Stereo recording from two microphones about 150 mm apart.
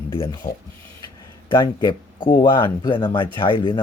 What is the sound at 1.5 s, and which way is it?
Speech, 30° left (ahead or behind).